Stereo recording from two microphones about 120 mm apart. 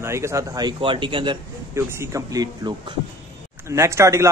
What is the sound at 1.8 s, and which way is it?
Speech, 25° right (ahead or behind).